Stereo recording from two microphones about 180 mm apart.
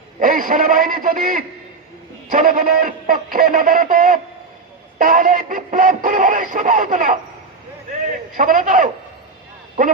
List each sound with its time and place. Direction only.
0.2 s music: 50° right (ahead or behind)
8.0 s a man's voice: 50° right (ahead or behind)